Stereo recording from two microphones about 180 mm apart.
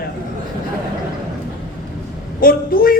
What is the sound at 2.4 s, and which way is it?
Speech, 55° left (ahead or behind).